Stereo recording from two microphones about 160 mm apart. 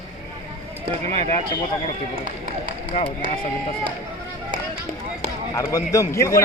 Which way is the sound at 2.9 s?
40° left (ahead or behind).